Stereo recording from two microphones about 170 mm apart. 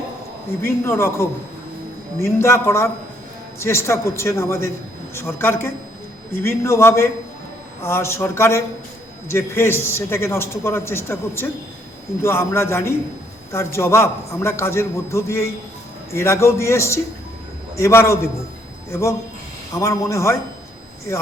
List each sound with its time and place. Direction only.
0.6 s a man's voice: 15° left (ahead or behind)
19.8 s a man's voice: 15° left (ahead or behind)